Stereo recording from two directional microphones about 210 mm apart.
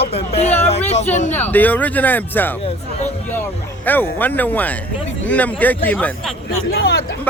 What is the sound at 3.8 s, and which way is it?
Speech, 10° left (ahead or behind).